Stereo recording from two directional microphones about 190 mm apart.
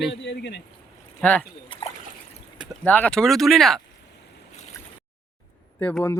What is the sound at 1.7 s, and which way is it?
Trickle, 25° left (ahead or behind).